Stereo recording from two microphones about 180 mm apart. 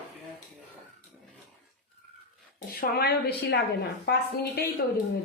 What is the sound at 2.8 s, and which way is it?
A woman's voice, 60° left (ahead or behind).